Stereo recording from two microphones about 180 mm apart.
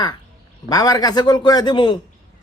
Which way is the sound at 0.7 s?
20° left (ahead or behind).